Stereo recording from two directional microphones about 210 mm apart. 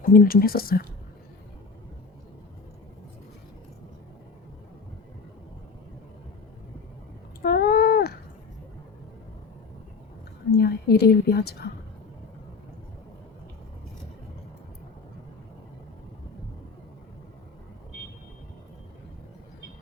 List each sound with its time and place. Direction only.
0.1 s speech: 45° left (ahead or behind)
7.4 s cat: 45° left (ahead or behind)
10.5 s a woman's voice: 50° left (ahead or behind)